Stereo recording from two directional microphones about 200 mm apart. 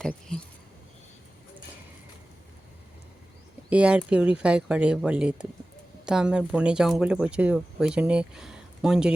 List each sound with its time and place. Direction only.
0.3 s speech: 5° left (ahead or behind)
3.7 s speech: 5° right (ahead or behind)